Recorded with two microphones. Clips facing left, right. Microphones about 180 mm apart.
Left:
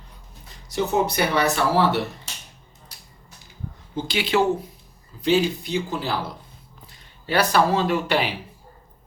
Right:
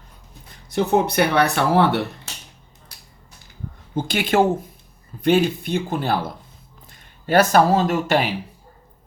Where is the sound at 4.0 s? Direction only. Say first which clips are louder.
Right 3 dB; 50° right (ahead or behind).